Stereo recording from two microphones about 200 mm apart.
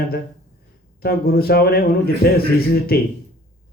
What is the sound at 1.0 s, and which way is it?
Speech, 50° left (ahead or behind).